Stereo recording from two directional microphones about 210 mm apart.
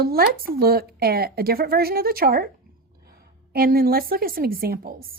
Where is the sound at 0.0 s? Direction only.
45° right (ahead or behind).